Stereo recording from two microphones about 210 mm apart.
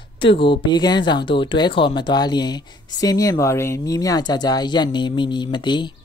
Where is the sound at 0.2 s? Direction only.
25° left (ahead or behind).